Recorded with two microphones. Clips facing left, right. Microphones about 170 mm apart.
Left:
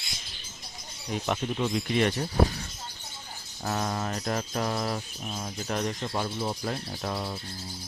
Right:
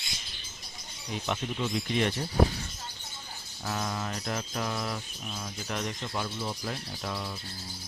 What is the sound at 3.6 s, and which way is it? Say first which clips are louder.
Mantra: left 3 dB; 45° left (ahead or behind).